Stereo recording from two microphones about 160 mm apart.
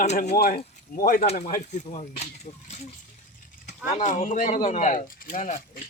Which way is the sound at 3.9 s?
50° left (ahead or behind).